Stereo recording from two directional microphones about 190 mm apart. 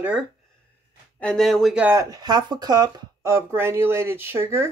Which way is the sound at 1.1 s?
5° left (ahead or behind).